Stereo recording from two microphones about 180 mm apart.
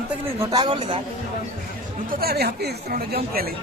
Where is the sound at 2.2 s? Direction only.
65° right (ahead or behind).